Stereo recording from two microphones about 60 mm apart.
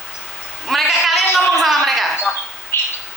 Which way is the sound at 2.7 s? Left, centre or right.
Left.